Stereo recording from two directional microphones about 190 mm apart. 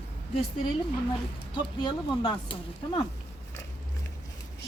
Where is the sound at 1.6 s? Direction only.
25° left (ahead or behind).